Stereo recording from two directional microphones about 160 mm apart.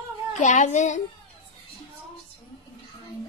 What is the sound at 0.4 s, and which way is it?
Speech, 50° left (ahead or behind).